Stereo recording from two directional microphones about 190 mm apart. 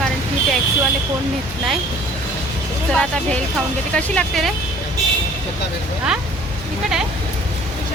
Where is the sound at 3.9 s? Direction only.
5° left (ahead or behind).